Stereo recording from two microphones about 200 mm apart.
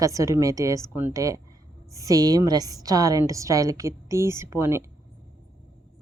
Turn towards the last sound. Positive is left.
turn(degrees=-15)  # may be behind; listen again after turning